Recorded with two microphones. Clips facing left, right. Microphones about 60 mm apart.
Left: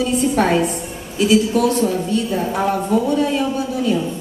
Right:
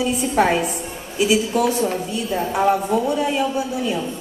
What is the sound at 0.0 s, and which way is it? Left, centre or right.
A woman's voice, centre.